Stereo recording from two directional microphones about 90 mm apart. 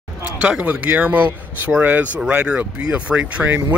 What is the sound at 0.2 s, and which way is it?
Speech, 15° right (ahead or behind).